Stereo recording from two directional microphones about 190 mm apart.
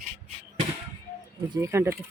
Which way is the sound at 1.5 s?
15° right (ahead or behind).